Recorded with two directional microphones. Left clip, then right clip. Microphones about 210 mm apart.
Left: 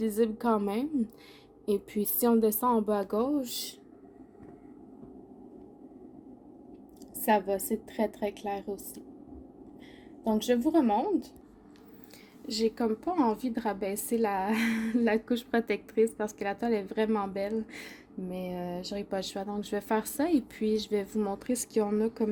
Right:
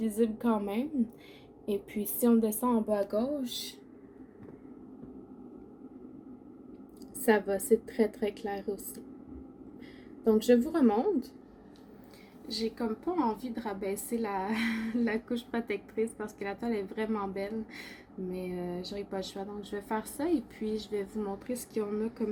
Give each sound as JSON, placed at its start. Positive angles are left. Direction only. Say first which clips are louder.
{"t": 0.0, "sound": "a woman's voice", "louder": "left 2 dB", "side_deg": 45}
{"t": 7.3, "sound": "a woman's voice", "louder": "right 1 dB", "side_deg": 45}
{"t": 10.2, "sound": "a woman's voice", "louder": "right 3 dB", "side_deg": 45}
{"t": 12.5, "sound": "a woman's voice", "louder": "left 5 dB", "side_deg": 50}